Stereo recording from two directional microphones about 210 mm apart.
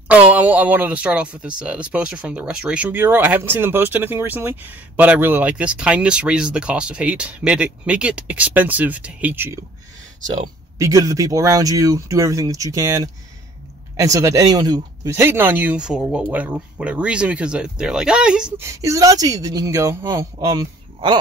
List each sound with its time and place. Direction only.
0.1 s speech: 5° right (ahead or behind)